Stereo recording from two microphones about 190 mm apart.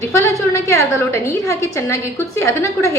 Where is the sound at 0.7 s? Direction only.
15° left (ahead or behind).